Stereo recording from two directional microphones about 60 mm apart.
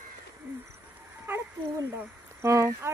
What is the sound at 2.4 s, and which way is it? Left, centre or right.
Speech, right.